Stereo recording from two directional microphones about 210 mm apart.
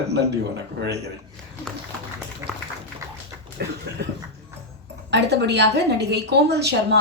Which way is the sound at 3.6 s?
50° right (ahead or behind).